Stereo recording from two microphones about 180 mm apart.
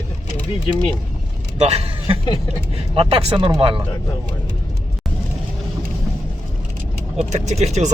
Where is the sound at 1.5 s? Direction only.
35° right (ahead or behind).